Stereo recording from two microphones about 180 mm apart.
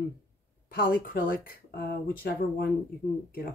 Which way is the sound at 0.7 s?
55° left (ahead or behind).